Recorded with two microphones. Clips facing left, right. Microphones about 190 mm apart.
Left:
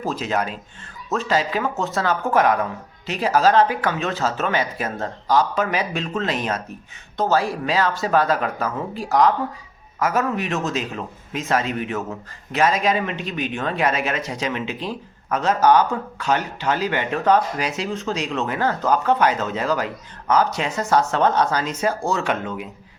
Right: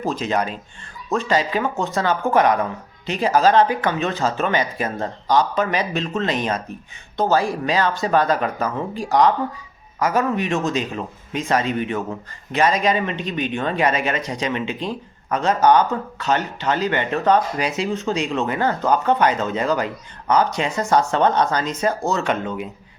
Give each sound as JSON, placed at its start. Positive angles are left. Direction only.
{"t": 0.0, "sound": "speech", "side_deg": 5}